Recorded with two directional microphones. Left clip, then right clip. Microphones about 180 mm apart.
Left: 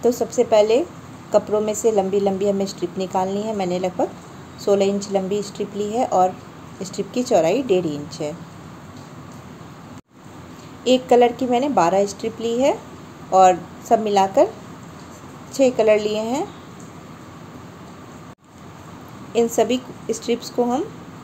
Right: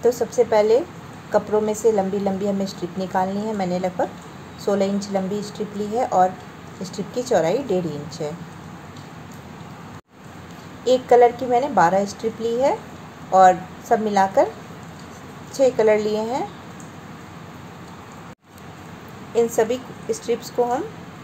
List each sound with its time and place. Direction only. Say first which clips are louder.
0.0 s a woman's voice: even; 10° left (ahead or behind)
10.8 s a woman's voice: right 1 dB; 10° left (ahead or behind)
15.5 s a woman's voice: left 1 dB; 10° left (ahead or behind)
19.3 s a woman's voice: left 1 dB; 10° left (ahead or behind)